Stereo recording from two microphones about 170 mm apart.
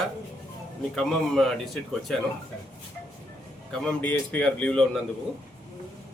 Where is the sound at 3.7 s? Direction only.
5° left (ahead or behind).